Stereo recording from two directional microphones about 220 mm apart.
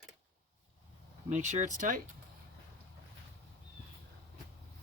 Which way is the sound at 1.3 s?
30° right (ahead or behind).